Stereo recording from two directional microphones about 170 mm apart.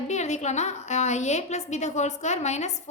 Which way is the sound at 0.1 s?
40° left (ahead or behind).